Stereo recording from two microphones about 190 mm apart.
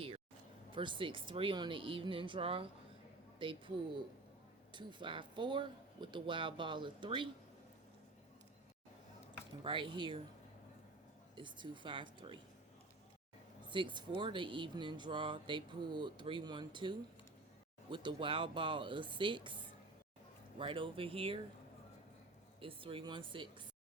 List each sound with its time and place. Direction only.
0.7 s speech: 25° right (ahead or behind)
4.7 s speech: 25° right (ahead or behind)
9.6 s speech: 25° right (ahead or behind)
11.3 s speech: 25° right (ahead or behind)
13.7 s speech: 25° right (ahead or behind)
22.6 s speech: 30° right (ahead or behind)